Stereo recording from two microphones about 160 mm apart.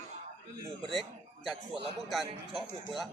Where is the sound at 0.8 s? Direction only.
Centre (ahead or behind).